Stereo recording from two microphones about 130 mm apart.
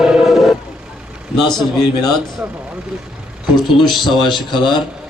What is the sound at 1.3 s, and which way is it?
Speech, 5° left (ahead or behind).